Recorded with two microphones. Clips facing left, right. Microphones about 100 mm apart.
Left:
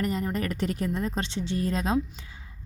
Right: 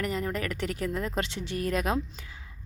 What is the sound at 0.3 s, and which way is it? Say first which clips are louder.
Speech: left 3 dB; 35° left (ahead or behind).